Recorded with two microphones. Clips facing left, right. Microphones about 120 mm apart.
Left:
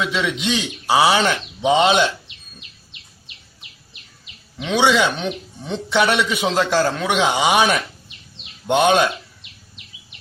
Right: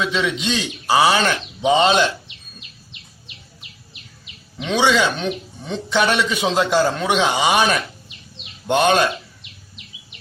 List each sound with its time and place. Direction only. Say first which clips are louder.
0.0 s a man's voice: right 1 dB; 5° left (ahead or behind)
4.5 s a man's voice: left 1 dB; 5° left (ahead or behind)
5.0 s a man's voice: even; 15° left (ahead or behind)
5.6 s a man's voice: left 1 dB; 5° left (ahead or behind)
6.4 s a man's voice: right 2 dB; 5° right (ahead or behind)